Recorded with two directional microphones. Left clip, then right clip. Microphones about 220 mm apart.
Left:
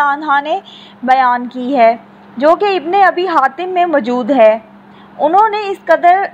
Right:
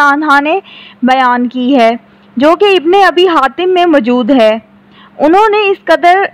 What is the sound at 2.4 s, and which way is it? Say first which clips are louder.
A woman's voice: right 4 dB; 35° right (ahead or behind).